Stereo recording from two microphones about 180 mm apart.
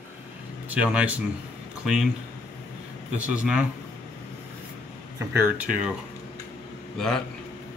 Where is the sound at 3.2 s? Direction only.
5° right (ahead or behind).